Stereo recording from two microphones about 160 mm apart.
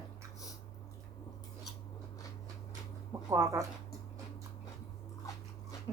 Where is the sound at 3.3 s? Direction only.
20° right (ahead or behind).